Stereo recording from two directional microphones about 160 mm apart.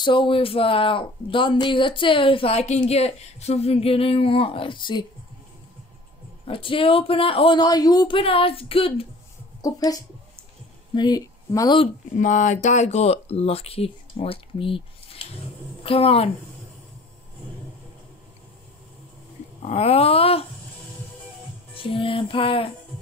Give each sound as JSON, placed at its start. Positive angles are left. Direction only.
{"t": 0.0, "sound": "speech", "side_deg": 30}
{"t": 6.4, "sound": "speech", "side_deg": 35}
{"t": 9.6, "sound": "speech", "side_deg": 20}
{"t": 12.2, "sound": "a woman's voice", "side_deg": 50}
{"t": 19.6, "sound": "speech", "side_deg": 40}
{"t": 21.7, "sound": "speech", "side_deg": 35}